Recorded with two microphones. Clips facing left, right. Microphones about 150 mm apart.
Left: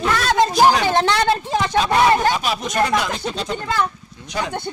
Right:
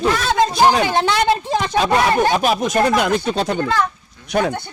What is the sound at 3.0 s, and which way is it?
Speech, 60° right (ahead or behind).